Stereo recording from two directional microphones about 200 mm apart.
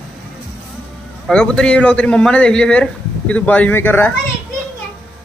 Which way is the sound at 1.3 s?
5° left (ahead or behind).